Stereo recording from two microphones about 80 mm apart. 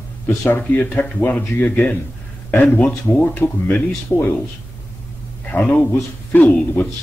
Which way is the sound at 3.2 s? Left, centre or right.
Left.